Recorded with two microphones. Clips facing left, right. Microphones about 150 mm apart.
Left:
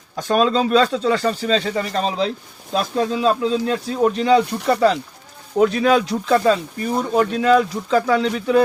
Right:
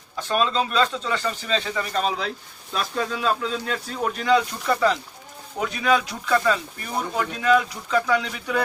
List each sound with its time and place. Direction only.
0.2 s speech: 40° left (ahead or behind)